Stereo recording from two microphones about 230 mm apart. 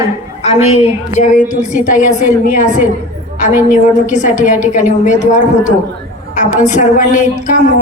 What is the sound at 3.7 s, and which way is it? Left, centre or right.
Speech, left.